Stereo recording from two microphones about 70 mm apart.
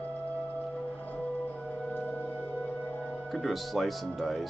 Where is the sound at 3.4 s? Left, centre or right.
Centre.